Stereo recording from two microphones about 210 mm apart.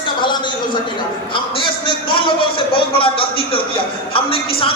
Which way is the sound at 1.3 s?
25° left (ahead or behind).